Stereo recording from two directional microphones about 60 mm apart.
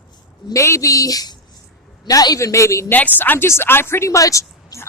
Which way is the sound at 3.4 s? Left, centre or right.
Left.